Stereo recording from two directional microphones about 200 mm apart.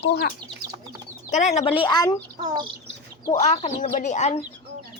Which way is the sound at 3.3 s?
35° left (ahead or behind).